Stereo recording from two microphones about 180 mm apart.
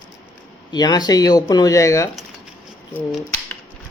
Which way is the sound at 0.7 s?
20° left (ahead or behind).